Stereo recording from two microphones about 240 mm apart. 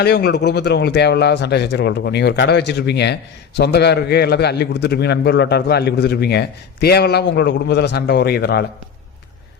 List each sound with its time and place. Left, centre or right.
0.0 s speech: left